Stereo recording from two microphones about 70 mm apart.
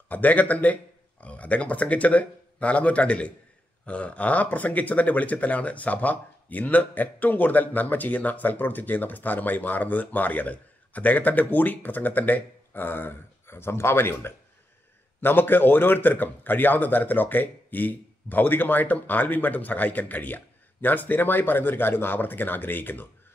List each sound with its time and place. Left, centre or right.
0.1 s speech: left